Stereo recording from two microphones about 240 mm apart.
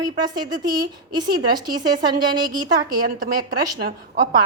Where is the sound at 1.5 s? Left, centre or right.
Centre.